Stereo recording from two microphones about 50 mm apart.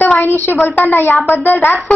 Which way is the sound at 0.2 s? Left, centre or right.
Left.